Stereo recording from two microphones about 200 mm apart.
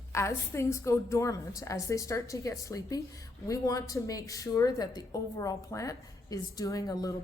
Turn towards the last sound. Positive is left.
turn(degrees=15)  # may be behind; listen again after turning